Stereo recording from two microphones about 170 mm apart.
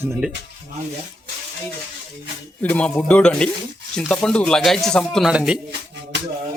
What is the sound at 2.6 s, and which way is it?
Speech, 10° left (ahead or behind).